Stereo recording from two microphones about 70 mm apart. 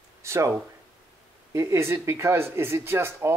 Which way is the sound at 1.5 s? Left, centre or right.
Right.